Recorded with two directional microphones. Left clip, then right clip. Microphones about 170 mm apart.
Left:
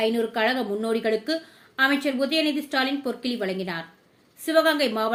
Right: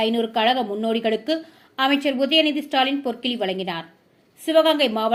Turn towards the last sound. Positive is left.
turn(degrees=-15)  # may be behind; listen again after turning